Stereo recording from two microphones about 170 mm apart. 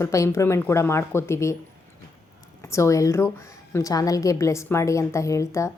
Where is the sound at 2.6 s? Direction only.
15° left (ahead or behind).